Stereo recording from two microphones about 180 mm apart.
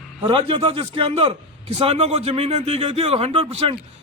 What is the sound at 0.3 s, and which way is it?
A man's voice, 30° right (ahead or behind).